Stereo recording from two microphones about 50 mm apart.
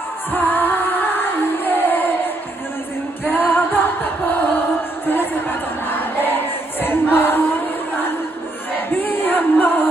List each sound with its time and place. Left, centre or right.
0.3 s music: left
3.3 s music: left
5.0 s crowd: left
8.7 s music: left